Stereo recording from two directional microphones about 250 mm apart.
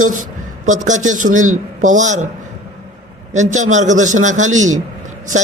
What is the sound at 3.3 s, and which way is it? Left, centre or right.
A man's voice, right.